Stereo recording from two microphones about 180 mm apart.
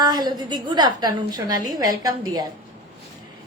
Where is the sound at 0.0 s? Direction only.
25° right (ahead or behind).